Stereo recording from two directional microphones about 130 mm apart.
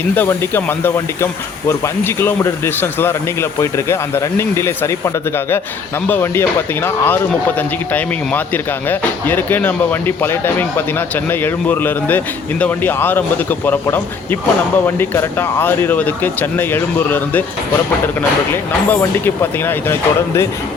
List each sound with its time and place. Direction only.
0.2 s speech: 15° left (ahead or behind)